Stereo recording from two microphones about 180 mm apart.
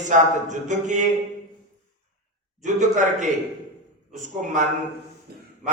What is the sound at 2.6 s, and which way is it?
A man's voice, 45° right (ahead or behind).